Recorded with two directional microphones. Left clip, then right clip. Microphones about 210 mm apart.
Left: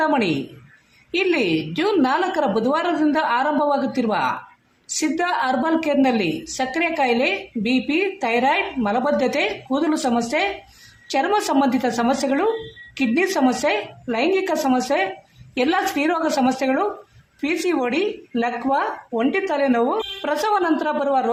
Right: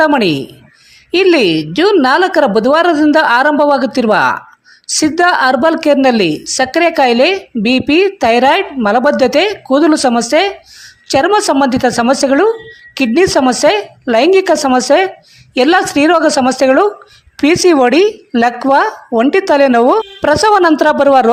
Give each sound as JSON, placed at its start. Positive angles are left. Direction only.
{"t": 0.0, "sound": "a woman's voice", "side_deg": -40}